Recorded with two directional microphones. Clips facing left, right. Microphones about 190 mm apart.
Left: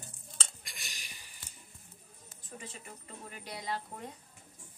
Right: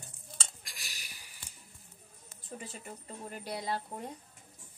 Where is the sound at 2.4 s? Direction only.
35° right (ahead or behind).